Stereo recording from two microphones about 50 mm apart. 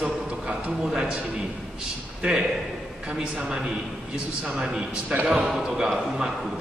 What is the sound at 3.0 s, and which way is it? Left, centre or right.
A man's voice, centre.